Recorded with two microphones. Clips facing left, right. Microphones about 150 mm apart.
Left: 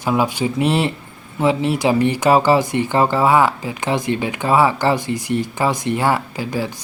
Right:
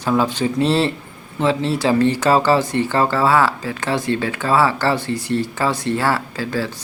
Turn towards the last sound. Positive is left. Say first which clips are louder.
# even
turn(degrees=15)  # may be behind; listen again after turning